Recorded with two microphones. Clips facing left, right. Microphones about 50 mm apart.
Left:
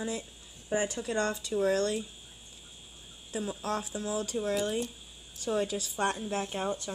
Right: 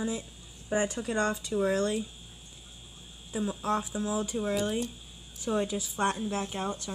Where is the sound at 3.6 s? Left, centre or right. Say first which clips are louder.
Right 5 dB; centre.